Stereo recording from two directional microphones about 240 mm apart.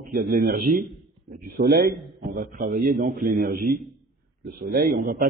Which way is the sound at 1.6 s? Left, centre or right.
Right.